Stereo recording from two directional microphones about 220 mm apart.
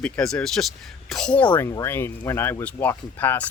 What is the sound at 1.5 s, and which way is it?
Speech, 15° left (ahead or behind).